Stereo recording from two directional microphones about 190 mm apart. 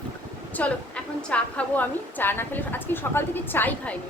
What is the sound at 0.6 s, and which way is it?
A woman's voice, 10° left (ahead or behind).